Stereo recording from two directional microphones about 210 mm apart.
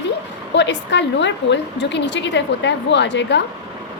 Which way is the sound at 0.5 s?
55° left (ahead or behind).